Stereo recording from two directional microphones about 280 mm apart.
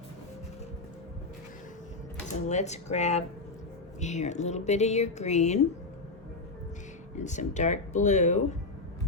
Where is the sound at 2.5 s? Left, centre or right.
Left.